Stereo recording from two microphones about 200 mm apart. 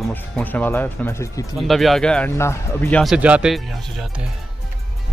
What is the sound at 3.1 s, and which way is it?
Speech, 5° right (ahead or behind).